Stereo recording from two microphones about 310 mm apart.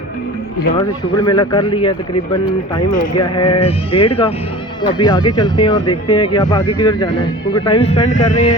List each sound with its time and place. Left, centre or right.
1.2 s speech: centre